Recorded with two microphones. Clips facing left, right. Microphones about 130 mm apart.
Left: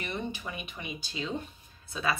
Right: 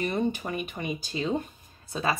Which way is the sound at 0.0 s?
45° right (ahead or behind).